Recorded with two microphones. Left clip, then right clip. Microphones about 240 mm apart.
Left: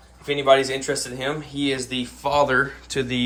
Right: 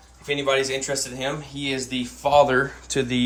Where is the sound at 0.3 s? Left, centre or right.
Centre.